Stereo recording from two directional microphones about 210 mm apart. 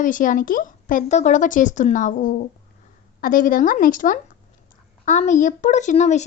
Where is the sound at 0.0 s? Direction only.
40° left (ahead or behind).